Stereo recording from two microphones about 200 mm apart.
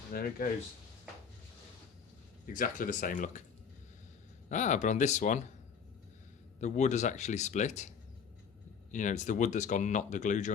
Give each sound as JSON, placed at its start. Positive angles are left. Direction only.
{"t": 0.1, "sound": "speech", "side_deg": 50}
{"t": 2.5, "sound": "speech", "side_deg": 40}
{"t": 4.4, "sound": "speech", "side_deg": 40}
{"t": 6.6, "sound": "speech", "side_deg": 35}
{"t": 8.9, "sound": "speech", "side_deg": 40}